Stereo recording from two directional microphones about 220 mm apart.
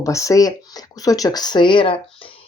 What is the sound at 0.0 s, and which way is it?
Speech, 15° left (ahead or behind).